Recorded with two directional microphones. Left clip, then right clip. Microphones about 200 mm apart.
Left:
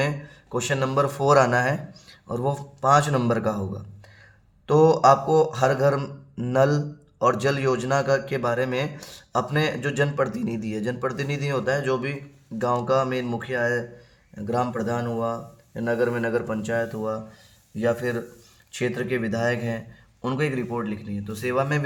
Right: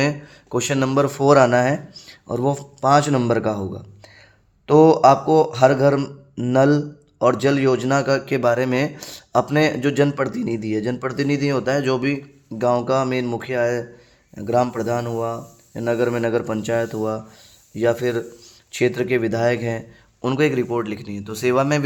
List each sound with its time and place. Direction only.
0.5 s speech: 35° right (ahead or behind)
4.6 s speech: 30° right (ahead or behind); by 21.8 s 50° right (ahead or behind)